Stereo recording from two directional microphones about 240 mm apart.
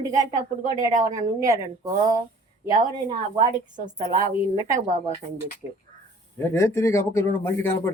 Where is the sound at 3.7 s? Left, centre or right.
Right.